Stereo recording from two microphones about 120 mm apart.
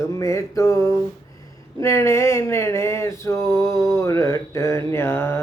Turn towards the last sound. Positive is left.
turn(degrees=20)  # may be behind; listen again after turning